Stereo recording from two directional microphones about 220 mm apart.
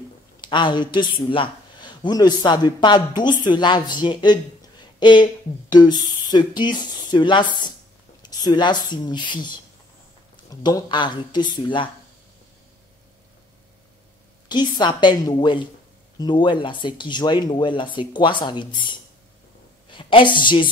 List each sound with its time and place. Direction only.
0.4 s speech: 20° left (ahead or behind)
14.5 s speech: 20° left (ahead or behind)